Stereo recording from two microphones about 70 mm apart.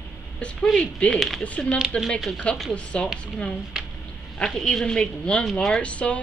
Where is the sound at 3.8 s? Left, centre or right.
Centre.